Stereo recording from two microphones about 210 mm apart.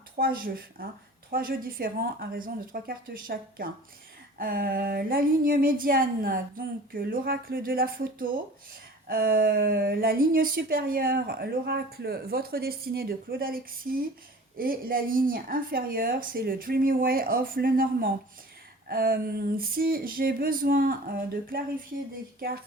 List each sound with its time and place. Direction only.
0.2 s speech: 45° right (ahead or behind)